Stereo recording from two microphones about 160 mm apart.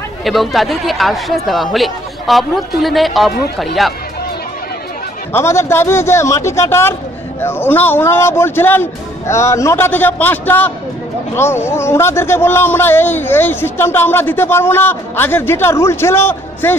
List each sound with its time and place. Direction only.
0.2 s speech: centre (ahead or behind)
5.3 s a man's voice: 15° left (ahead or behind)